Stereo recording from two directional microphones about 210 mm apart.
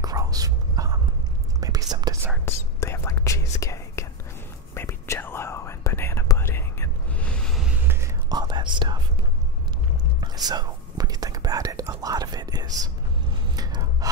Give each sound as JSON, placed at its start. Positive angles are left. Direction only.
{"t": 0.0, "sound": "whispering", "side_deg": -15}
{"t": 2.4, "sound": "whispering", "side_deg": 15}
{"t": 7.9, "sound": "whispering", "side_deg": -15}
{"t": 10.2, "sound": "whispering", "side_deg": -20}
{"t": 13.6, "sound": "a sound", "side_deg": -20}